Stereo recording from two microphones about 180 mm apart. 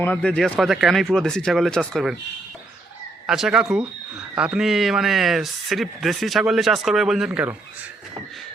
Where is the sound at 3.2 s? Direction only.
5° right (ahead or behind).